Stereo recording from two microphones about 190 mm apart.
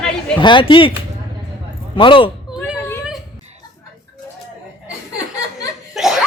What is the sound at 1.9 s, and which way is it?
Speech, 25° left (ahead or behind).